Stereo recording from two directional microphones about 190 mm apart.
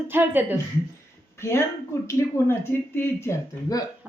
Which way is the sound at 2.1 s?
10° left (ahead or behind).